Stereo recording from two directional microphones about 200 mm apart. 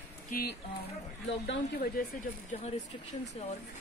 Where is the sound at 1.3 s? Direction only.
65° left (ahead or behind).